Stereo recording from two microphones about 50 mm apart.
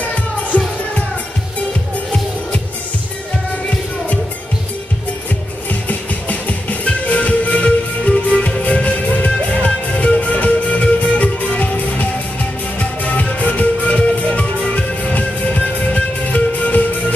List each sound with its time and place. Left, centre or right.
0.0 s music: left
5.7 s music: left